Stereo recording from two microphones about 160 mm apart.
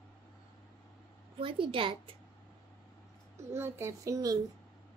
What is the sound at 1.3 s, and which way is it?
Speech, 35° right (ahead or behind).